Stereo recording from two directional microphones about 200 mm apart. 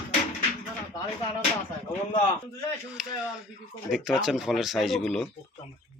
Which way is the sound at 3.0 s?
Centre (ahead or behind).